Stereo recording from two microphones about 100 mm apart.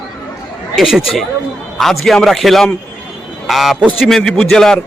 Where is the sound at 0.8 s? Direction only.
5° right (ahead or behind).